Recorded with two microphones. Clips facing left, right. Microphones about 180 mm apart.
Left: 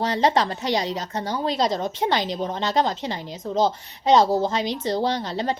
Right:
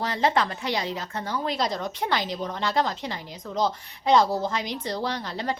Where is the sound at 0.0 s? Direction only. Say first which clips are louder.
Left 3 dB; 35° left (ahead or behind).